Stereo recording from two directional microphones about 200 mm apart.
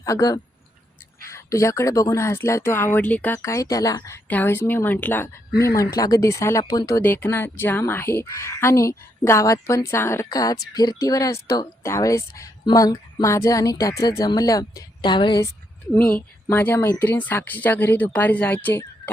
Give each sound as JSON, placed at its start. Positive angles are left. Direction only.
{"t": 0.0, "sound": "a woman's voice", "side_deg": 15}
{"t": 16.0, "sound": "speech", "side_deg": 10}